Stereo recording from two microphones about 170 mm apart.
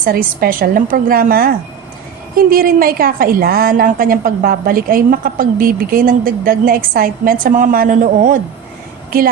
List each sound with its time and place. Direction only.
0.0 s a woman's voice: 60° right (ahead or behind)